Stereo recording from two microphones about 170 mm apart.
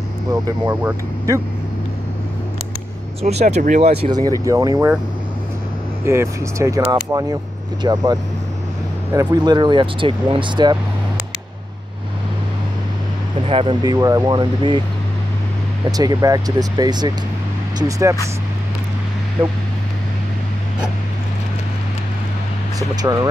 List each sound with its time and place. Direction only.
0.7 s speech: 15° right (ahead or behind)
3.2 s speech: 40° right (ahead or behind)
4.5 s speech: 20° right (ahead or behind)
6.0 s speech: 15° right (ahead or behind)
13.5 s speech: 30° right (ahead or behind)
13.9 s speech: 20° right (ahead or behind)
16.0 s speech: 20° right (ahead or behind)
23.0 s speech: 15° right (ahead or behind)